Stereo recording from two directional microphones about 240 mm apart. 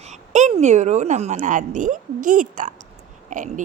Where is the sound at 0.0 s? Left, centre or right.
Right.